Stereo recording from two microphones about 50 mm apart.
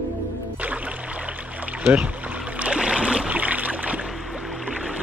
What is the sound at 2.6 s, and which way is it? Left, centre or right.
Boat, centre.